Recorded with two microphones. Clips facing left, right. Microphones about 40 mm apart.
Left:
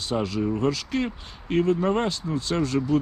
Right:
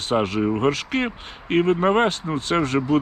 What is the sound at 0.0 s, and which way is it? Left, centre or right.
Speech, right.